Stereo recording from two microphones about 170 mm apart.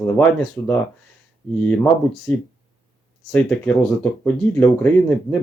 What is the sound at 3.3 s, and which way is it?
Speech, 5° left (ahead or behind).